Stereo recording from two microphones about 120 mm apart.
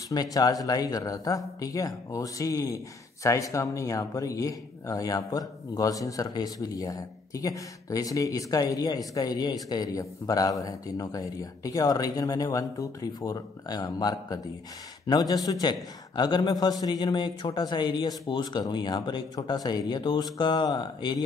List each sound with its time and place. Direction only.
0.1 s a man's voice: 30° left (ahead or behind)